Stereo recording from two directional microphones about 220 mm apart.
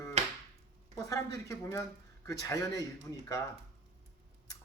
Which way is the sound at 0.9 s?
15° left (ahead or behind).